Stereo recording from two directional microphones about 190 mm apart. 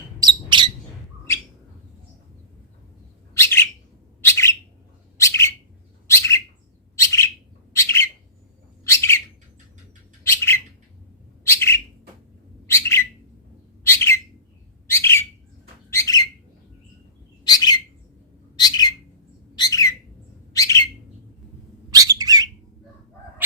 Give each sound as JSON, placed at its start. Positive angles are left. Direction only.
{"t": 0.2, "sound": "bird", "side_deg": -25}
{"t": 3.3, "sound": "bird", "side_deg": 15}
{"t": 5.1, "sound": "bird", "side_deg": 15}
{"t": 10.2, "sound": "bird", "side_deg": 15}
{"t": 17.4, "sound": "bird", "side_deg": 20}
{"t": 21.8, "sound": "bird", "side_deg": -20}